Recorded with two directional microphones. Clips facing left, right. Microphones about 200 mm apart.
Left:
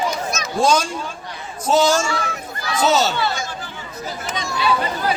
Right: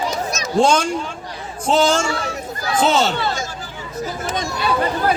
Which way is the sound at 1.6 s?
30° right (ahead or behind).